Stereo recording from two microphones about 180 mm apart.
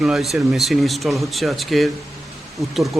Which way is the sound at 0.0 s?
Centre (ahead or behind).